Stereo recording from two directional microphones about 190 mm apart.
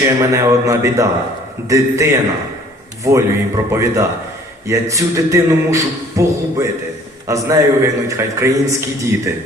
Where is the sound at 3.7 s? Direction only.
15° right (ahead or behind).